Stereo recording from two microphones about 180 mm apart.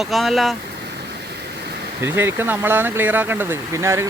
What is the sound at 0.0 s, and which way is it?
Speech, centre (ahead or behind).